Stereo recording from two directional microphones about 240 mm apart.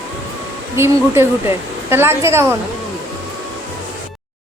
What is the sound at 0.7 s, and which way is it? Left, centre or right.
Speech, centre.